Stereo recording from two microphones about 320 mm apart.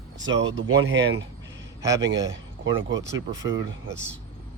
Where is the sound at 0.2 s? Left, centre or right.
Right.